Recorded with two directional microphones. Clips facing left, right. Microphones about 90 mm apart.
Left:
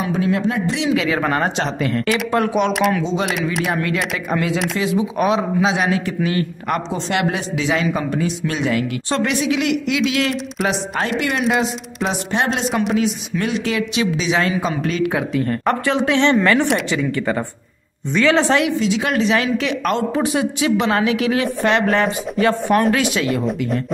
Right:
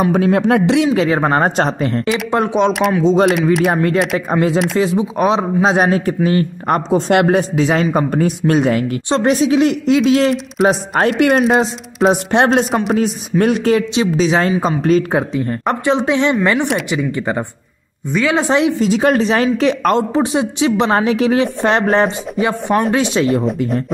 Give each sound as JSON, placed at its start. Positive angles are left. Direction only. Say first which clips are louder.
{"t": 0.0, "sound": "speech", "louder": "right 6 dB", "side_deg": -55}
{"t": 0.8, "sound": "speech", "louder": "right 4 dB", "side_deg": -35}
{"t": 3.7, "sound": "speech", "louder": "right 6 dB", "side_deg": -40}
{"t": 5.7, "sound": "speech", "louder": "right 5 dB", "side_deg": -45}
{"t": 6.9, "sound": "speech", "louder": "right 8 dB", "side_deg": -50}
{"t": 9.1, "sound": "speech", "louder": "right 6 dB", "side_deg": -35}
{"t": 10.6, "sound": "speech", "louder": "right 8 dB", "side_deg": -50}
{"t": 11.4, "sound": "speech", "louder": "right 4 dB", "side_deg": -40}
{"t": 15.4, "sound": "speech", "louder": "right 2 dB", "side_deg": -20}
{"t": 18.8, "sound": "speech", "louder": "right 5 dB", "side_deg": -45}
{"t": 20.2, "sound": "speech", "louder": "right 3 dB", "side_deg": -25}
{"t": 22.4, "sound": "speech", "louder": "even", "side_deg": -15}
{"t": 23.1, "sound": "speech", "louder": "right 5 dB", "side_deg": -35}